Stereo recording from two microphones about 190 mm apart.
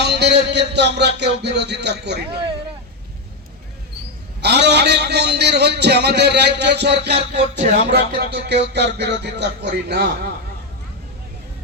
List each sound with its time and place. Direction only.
0.0 s a man's voice: 60° right (ahead or behind)
4.4 s a man's voice: 60° right (ahead or behind)